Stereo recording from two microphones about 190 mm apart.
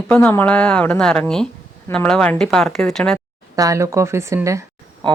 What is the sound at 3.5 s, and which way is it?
Speech, 15° right (ahead or behind).